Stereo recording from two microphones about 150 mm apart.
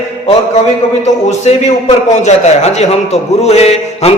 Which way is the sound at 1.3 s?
50° left (ahead or behind).